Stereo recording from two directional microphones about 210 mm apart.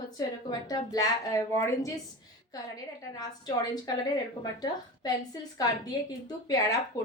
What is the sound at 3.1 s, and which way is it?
A woman's voice, 20° left (ahead or behind).